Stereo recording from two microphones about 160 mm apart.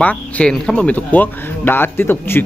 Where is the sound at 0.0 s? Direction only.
10° left (ahead or behind).